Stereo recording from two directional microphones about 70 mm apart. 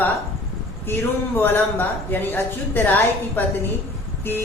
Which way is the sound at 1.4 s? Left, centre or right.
Left.